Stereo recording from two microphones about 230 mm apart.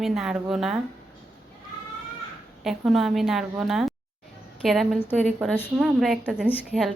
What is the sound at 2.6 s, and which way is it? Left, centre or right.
Speech, centre.